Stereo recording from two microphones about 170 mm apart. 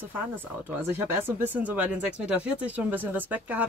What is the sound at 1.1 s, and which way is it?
Speech, 10° right (ahead or behind).